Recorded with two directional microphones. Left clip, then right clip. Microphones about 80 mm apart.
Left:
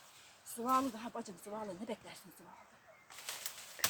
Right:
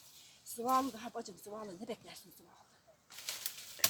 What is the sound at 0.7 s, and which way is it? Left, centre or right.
Speech, left.